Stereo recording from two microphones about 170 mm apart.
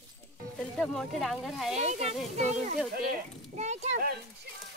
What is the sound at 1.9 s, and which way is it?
A child's voice, 40° right (ahead or behind).